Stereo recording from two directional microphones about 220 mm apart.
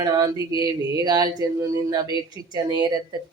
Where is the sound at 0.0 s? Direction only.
20° right (ahead or behind).